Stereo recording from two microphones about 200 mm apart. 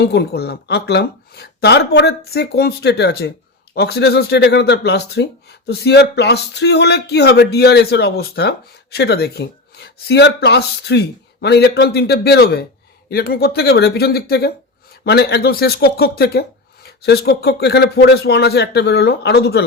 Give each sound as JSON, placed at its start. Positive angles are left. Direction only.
{"t": 0.0, "sound": "speech", "side_deg": 55}